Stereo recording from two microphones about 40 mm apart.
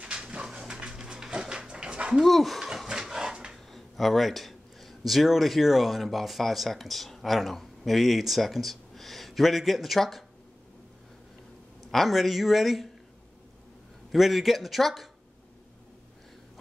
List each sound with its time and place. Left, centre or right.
0.6 s dog: right
2.2 s speech: centre
2.9 s pig: centre
3.5 s speech: centre
11.9 s speech: centre
14.1 s speech: centre